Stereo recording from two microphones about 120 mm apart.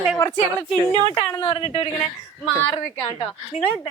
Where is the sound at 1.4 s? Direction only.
45° left (ahead or behind).